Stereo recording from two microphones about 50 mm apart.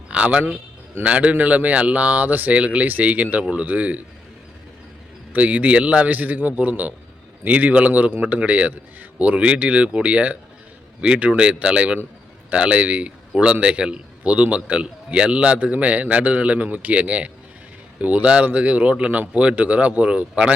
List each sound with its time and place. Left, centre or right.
0.1 s a man's voice: right
2.6 s a man's voice: right
5.3 s a man's voice: right